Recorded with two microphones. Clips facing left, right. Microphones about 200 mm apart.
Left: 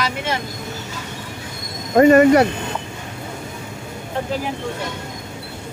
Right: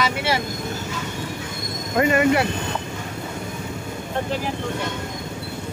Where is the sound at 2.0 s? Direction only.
40° left (ahead or behind).